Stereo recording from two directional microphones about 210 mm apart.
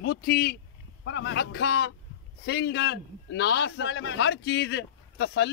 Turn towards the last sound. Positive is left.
turn(degrees=55)  # may be behind; listen again after turning